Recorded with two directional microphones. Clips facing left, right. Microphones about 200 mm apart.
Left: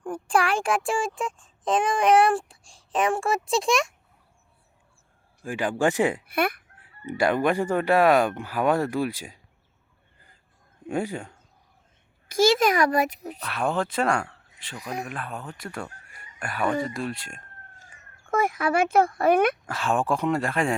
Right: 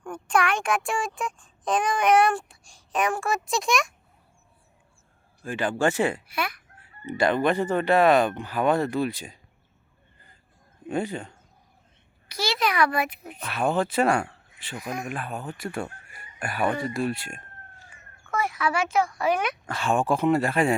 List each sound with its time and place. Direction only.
0.0 s a child's voice: 30° left (ahead or behind)
5.4 s speech: 10° left (ahead or behind)
6.2 s speech: 55° left (ahead or behind)
7.1 s speech: 10° left (ahead or behind)
10.8 s speech: 10° left (ahead or behind)
12.3 s a child's voice: 45° left (ahead or behind)
13.5 s speech: centre (ahead or behind)
14.8 s speech: 35° left (ahead or behind)
15.1 s speech: 5° right (ahead or behind)
16.0 s a sound: 5° right (ahead or behind)
16.9 s speech: 5° right (ahead or behind)
18.3 s speech: 50° left (ahead or behind)
19.6 s speech: centre (ahead or behind)